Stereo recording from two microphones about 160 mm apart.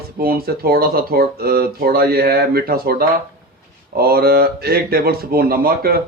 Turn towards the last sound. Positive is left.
turn(degrees=-70)  # may be behind; listen again after turning